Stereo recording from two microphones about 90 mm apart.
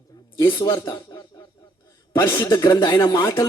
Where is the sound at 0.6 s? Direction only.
30° left (ahead or behind).